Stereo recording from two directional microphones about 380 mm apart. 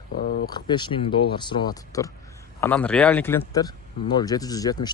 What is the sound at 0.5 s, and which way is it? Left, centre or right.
Speech, centre.